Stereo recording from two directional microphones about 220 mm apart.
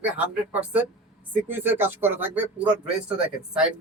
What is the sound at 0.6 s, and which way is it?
Speech, 5° right (ahead or behind).